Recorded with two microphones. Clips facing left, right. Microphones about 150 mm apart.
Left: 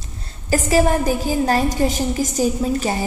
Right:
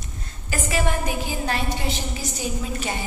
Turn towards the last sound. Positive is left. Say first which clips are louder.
# left 8 dB
turn(degrees=40)  # may be behind; listen again after turning